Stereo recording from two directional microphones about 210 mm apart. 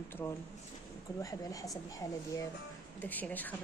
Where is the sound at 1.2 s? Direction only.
15° left (ahead or behind).